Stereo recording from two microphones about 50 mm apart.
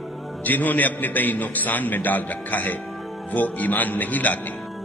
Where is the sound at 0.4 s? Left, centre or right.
Left.